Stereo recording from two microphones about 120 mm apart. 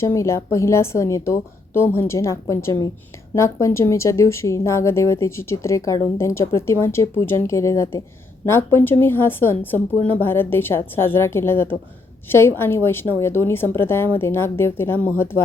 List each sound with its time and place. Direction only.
0.0 s speech: 25° left (ahead or behind)